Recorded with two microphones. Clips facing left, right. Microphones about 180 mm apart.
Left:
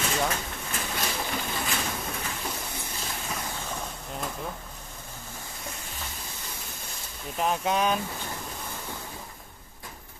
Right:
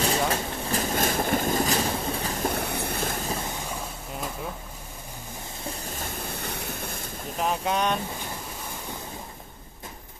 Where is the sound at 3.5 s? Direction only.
10° right (ahead or behind).